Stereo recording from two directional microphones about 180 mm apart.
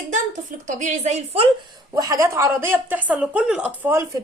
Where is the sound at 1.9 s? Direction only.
20° right (ahead or behind).